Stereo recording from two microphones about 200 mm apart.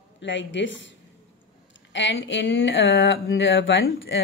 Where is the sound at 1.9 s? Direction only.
65° left (ahead or behind).